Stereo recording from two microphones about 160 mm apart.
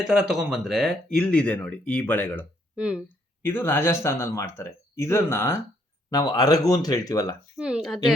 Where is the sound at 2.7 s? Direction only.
10° right (ahead or behind).